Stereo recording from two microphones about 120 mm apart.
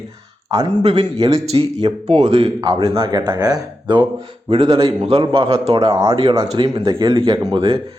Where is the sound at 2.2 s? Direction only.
60° right (ahead or behind).